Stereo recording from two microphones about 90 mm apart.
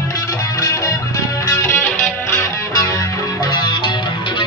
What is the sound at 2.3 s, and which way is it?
Music, 40° left (ahead or behind).